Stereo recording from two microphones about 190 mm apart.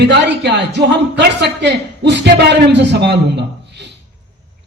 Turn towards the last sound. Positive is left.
turn(degrees=-65)  # may be behind; listen again after turning